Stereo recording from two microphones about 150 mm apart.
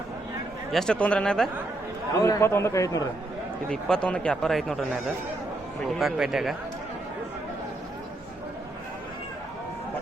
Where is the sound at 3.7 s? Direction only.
5° left (ahead or behind).